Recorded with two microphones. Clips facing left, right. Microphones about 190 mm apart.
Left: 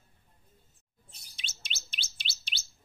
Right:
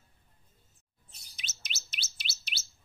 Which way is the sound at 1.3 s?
30° left (ahead or behind).